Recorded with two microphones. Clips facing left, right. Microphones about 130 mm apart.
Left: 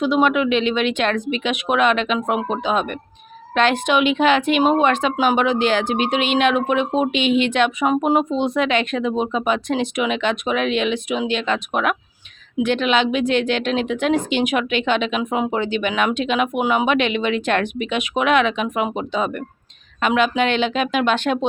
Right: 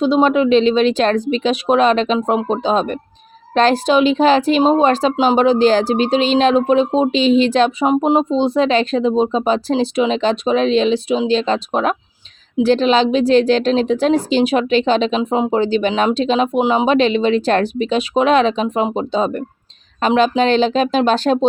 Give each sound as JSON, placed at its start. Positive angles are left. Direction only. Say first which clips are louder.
{"t": 0.0, "sound": "a woman's voice", "louder": "right 4 dB", "side_deg": -30}
{"t": 7.9, "sound": "a woman's voice", "louder": "right 3 dB", "side_deg": -25}